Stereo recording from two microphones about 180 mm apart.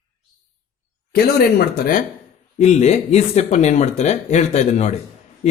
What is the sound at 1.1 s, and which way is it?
Speech, 55° left (ahead or behind).